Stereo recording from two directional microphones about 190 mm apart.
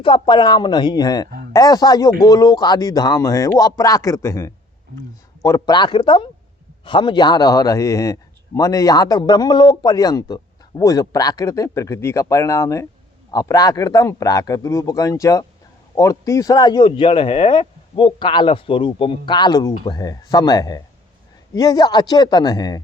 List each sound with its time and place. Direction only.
0.0 s a man's voice: 25° left (ahead or behind)